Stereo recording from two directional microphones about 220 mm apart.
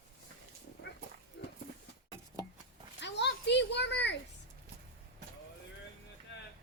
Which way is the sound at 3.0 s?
50° left (ahead or behind).